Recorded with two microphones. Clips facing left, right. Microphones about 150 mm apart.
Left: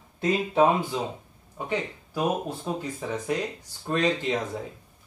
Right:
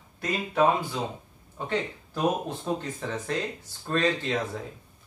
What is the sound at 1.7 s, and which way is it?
Speech, 10° left (ahead or behind).